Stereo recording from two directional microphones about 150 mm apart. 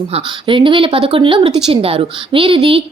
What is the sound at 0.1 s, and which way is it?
Speech, 35° right (ahead or behind).